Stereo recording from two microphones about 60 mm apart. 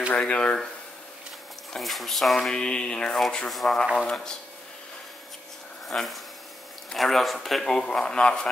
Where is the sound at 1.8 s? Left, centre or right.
Centre.